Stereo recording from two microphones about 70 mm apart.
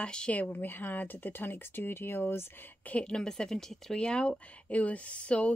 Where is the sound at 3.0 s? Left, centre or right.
Centre.